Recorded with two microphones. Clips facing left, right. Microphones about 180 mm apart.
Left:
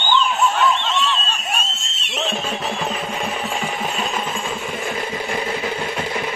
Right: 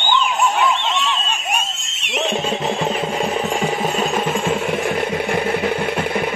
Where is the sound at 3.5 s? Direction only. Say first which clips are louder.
Right 5 dB; 40° right (ahead or behind).